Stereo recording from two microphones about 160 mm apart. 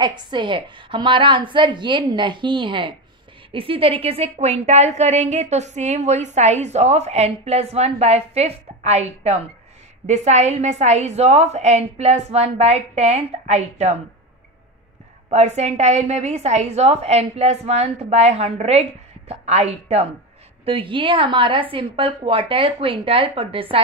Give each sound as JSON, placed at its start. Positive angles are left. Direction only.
{"t": 0.0, "sound": "a woman's voice", "side_deg": -30}
{"t": 15.2, "sound": "a woman's voice", "side_deg": -45}